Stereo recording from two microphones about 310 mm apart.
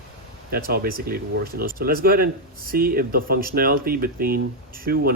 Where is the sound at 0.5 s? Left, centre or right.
Right.